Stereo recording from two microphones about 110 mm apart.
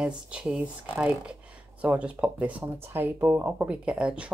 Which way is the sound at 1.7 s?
10° right (ahead or behind).